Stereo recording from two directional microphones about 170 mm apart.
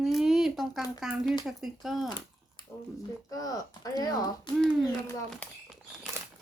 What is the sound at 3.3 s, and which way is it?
Speech, 20° left (ahead or behind).